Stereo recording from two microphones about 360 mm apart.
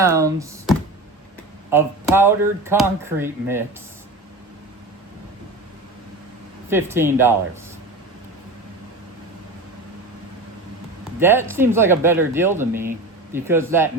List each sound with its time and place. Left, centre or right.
0.0 s speech: centre
6.7 s speech: centre
11.2 s speech: centre